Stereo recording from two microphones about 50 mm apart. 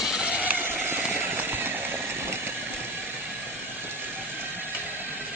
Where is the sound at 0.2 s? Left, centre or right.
Right.